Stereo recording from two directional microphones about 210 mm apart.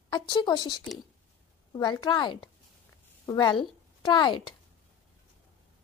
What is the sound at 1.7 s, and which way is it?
A woman's voice, 20° left (ahead or behind).